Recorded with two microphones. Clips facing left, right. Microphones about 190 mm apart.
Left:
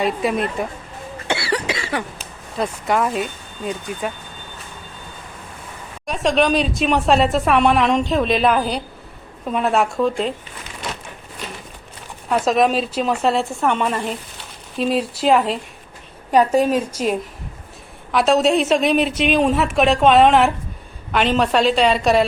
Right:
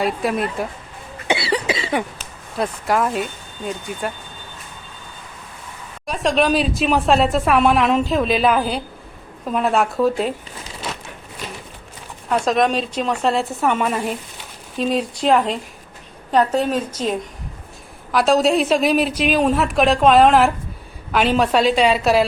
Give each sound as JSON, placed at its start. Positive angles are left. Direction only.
{"t": 0.0, "sound": "a woman's voice", "side_deg": 0}
{"t": 1.3, "sound": "cough", "side_deg": -20}
{"t": 2.6, "sound": "a woman's voice", "side_deg": 0}
{"t": 6.1, "sound": "a woman's voice", "side_deg": 0}
{"t": 12.3, "sound": "a woman's voice", "side_deg": 0}